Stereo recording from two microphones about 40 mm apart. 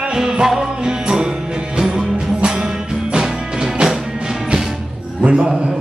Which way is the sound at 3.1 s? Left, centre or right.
Centre.